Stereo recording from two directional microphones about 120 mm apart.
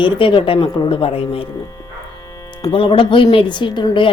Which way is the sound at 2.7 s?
45° left (ahead or behind).